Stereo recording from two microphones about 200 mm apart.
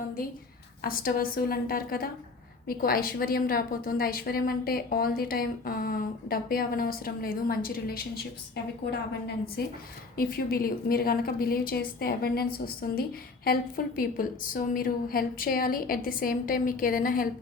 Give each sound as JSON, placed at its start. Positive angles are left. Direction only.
{"t": 0.8, "sound": "a woman's voice", "side_deg": 45}
{"t": 10.2, "sound": "a woman's voice", "side_deg": 50}